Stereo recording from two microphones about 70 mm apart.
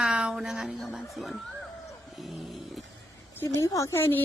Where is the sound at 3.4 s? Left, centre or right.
Left.